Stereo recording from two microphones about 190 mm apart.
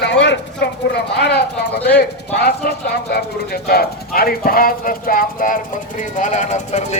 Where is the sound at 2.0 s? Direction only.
55° left (ahead or behind).